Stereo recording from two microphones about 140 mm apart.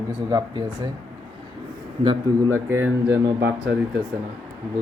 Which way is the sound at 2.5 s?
15° right (ahead or behind).